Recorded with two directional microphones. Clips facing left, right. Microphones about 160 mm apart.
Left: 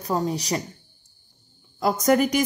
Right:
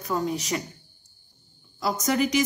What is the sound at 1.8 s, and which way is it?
Speech, 50° left (ahead or behind).